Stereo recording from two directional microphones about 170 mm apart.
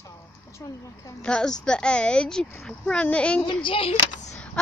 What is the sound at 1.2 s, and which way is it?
Speech, 5° left (ahead or behind).